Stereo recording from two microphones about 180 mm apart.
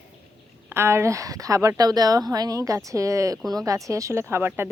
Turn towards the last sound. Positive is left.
turn(degrees=-10)  # may be behind; listen again after turning